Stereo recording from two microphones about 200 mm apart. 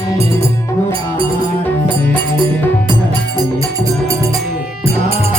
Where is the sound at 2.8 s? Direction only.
20° right (ahead or behind).